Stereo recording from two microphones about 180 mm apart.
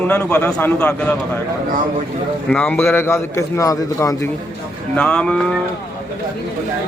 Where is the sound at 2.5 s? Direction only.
10° left (ahead or behind).